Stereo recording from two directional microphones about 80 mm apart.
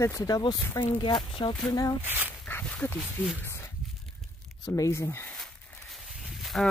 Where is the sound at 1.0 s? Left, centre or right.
Left.